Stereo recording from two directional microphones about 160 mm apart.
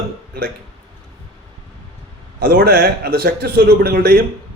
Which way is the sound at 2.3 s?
75° right (ahead or behind).